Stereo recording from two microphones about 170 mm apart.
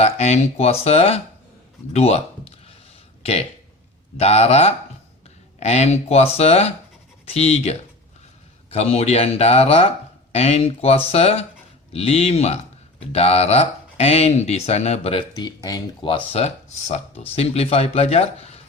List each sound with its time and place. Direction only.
0.0 s speech: 40° left (ahead or behind)
4.2 s speech: 35° left (ahead or behind)
15.3 s speech: 25° left (ahead or behind)